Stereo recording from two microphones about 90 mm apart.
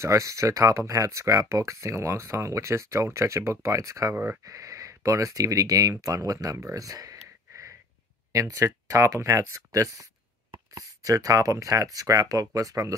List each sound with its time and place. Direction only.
0.0 s speech: 35° right (ahead or behind)